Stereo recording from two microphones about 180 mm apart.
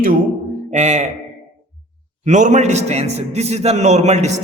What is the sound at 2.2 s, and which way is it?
A man's voice, 40° right (ahead or behind).